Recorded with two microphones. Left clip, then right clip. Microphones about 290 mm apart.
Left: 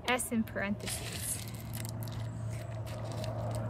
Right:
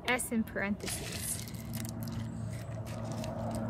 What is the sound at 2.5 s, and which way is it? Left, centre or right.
Vehicle, right.